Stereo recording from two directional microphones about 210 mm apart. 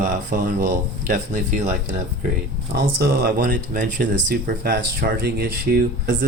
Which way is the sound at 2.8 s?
50° right (ahead or behind).